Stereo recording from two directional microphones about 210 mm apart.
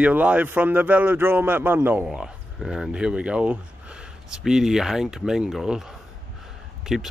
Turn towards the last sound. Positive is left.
turn(degrees=0)  # may be behind; listen again after turning